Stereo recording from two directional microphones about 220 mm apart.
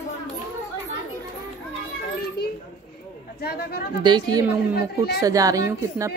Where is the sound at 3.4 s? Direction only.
45° left (ahead or behind).